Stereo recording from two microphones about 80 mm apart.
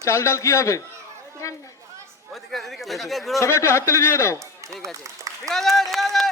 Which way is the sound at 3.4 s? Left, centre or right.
Left.